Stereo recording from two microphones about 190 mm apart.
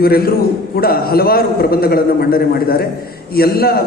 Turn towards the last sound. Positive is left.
turn(degrees=55)  # may be behind; listen again after turning